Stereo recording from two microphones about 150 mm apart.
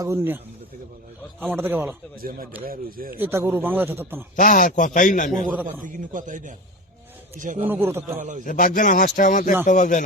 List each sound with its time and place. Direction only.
0.0 s speech: 15° right (ahead or behind)
1.4 s speech: 15° right (ahead or behind)
2.6 s speech: 75° right (ahead or behind)
3.2 s speech: 15° right (ahead or behind)
4.4 s speech: 60° left (ahead or behind)
5.8 s speech: 60° right (ahead or behind)
7.7 s speech: 15° right (ahead or behind)
8.1 s speech: 60° right (ahead or behind)
8.4 s speech: 65° left (ahead or behind)